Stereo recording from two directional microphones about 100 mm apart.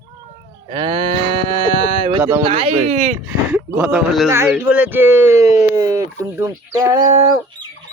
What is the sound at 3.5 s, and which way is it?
Speech, 15° right (ahead or behind).